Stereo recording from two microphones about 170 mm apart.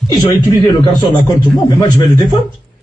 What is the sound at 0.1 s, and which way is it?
Speech, 25° left (ahead or behind).